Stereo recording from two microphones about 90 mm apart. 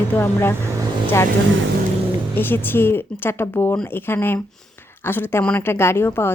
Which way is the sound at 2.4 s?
25° left (ahead or behind).